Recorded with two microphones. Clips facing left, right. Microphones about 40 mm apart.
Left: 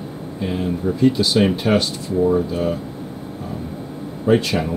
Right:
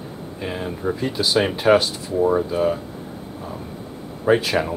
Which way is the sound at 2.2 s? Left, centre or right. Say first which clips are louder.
Left 1 dB; right.